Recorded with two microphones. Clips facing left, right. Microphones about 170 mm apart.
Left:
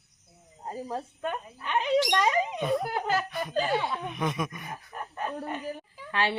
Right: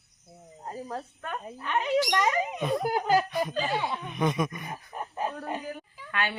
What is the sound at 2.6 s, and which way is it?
Speech, centre (ahead or behind).